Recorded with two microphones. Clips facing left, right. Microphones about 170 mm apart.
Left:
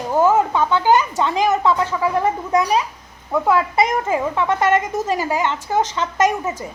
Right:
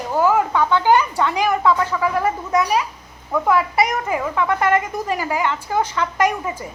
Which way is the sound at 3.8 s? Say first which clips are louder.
Left 2 dB; 25° left (ahead or behind).